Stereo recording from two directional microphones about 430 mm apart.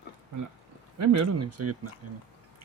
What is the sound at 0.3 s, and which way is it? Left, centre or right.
Speech, right.